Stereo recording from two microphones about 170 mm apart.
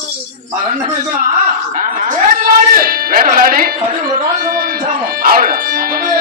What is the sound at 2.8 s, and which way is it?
Music, 55° right (ahead or behind).